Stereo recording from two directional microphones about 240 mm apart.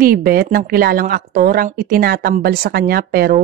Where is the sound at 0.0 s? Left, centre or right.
Right.